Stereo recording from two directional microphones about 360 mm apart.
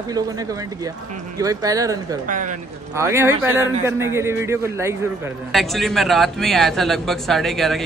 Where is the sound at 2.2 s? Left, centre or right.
Right.